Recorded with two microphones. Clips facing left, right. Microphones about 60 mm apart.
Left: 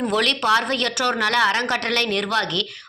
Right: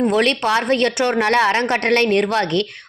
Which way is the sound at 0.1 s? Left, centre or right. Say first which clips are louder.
Right 2 dB; right.